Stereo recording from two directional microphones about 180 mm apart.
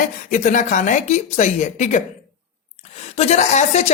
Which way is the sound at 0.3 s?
45° left (ahead or behind).